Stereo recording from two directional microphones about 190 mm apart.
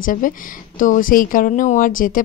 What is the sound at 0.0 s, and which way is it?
A woman's voice, 45° left (ahead or behind).